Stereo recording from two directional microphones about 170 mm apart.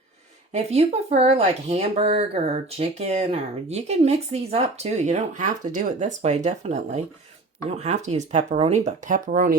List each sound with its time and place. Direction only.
0.5 s speech: 40° right (ahead or behind)